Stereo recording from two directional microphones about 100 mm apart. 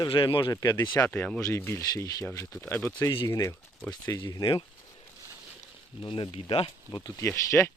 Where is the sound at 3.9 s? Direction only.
45° left (ahead or behind).